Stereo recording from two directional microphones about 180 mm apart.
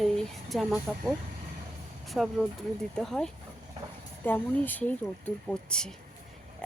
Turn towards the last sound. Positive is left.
turn(degrees=5)  # may be behind; listen again after turning